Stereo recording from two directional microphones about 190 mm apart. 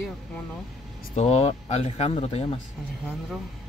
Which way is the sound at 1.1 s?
30° left (ahead or behind).